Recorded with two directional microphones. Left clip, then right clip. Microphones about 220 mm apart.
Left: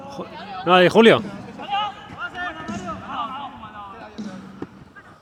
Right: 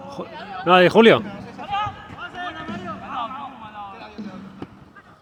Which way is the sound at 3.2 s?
45° right (ahead or behind).